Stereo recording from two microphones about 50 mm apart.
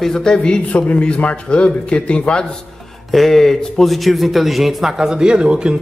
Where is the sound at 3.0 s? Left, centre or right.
Centre.